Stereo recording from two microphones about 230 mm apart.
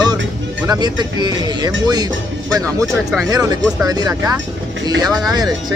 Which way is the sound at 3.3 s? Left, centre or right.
Centre.